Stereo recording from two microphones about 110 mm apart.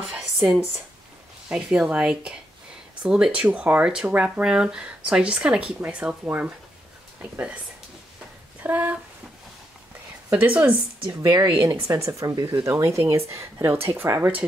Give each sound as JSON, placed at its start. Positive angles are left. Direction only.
{"t": 0.1, "sound": "a sound", "side_deg": 0}
{"t": 1.5, "sound": "speech", "side_deg": -10}
{"t": 8.6, "sound": "speech", "side_deg": -15}
{"t": 10.6, "sound": "speech", "side_deg": -15}
{"t": 11.2, "sound": "speech", "side_deg": -45}
{"t": 11.7, "sound": "a woman's voice", "side_deg": -30}